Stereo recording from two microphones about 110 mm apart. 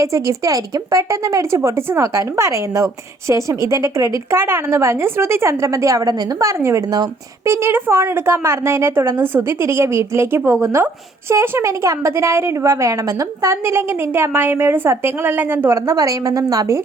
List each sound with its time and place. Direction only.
0.0 s a woman's voice: 30° right (ahead or behind)